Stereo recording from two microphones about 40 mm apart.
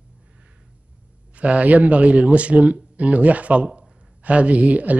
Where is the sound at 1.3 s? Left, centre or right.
Right.